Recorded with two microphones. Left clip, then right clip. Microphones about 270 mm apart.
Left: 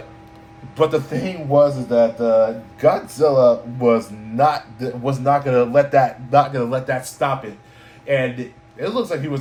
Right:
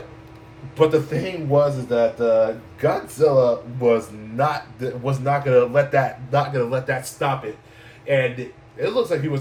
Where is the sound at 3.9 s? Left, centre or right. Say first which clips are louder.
Left 2 dB; centre.